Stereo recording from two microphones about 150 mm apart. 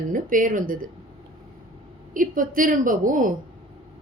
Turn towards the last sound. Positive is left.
turn(degrees=-60)  # may be behind; listen again after turning